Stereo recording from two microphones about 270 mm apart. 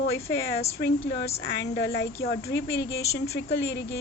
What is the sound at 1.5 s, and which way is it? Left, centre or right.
Speech, left.